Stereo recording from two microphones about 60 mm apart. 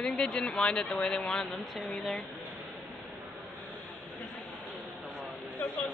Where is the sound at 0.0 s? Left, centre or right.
Centre.